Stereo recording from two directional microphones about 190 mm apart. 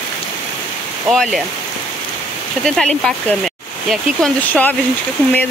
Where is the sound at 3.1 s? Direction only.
Centre (ahead or behind).